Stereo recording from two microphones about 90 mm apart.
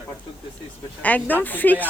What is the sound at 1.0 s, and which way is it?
Speech, 20° left (ahead or behind).